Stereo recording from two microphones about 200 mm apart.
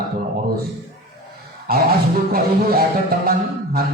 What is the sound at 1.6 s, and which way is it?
A man's voice, 50° right (ahead or behind).